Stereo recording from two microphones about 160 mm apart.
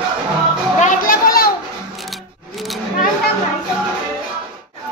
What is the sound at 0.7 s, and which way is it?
Music, 55° left (ahead or behind).